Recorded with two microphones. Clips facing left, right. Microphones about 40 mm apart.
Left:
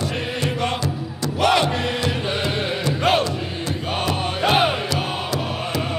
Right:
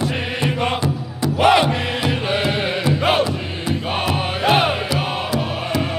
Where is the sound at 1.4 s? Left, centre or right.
Centre.